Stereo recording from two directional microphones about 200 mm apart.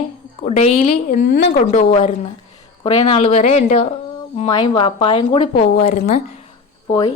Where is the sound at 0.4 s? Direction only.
30° left (ahead or behind).